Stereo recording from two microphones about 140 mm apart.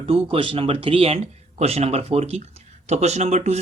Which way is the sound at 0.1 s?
40° right (ahead or behind).